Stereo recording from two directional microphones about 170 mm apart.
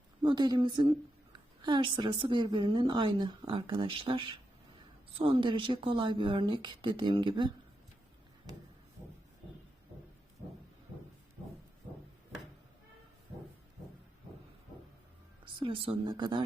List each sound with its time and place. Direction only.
0.2 s a woman's voice: 25° right (ahead or behind)
15.6 s a woman's voice: 30° right (ahead or behind)